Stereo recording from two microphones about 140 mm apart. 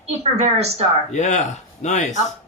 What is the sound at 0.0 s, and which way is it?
Speech, 50° right (ahead or behind).